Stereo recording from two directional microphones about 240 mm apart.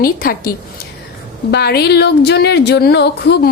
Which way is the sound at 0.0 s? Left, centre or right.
Left.